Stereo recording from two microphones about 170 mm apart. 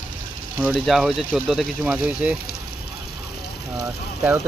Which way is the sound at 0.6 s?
Centre (ahead or behind).